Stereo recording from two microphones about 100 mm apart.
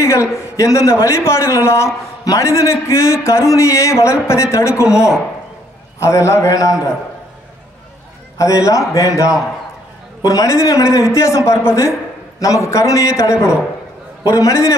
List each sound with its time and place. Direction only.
0.0 s a man's voice: 30° left (ahead or behind)
5.9 s a man's voice: 30° left (ahead or behind)
8.4 s a man's voice: 30° left (ahead or behind)